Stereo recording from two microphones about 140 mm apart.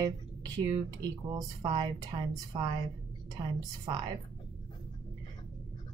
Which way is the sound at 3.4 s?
30° right (ahead or behind).